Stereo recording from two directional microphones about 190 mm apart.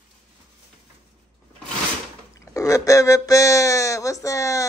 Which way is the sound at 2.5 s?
15° left (ahead or behind).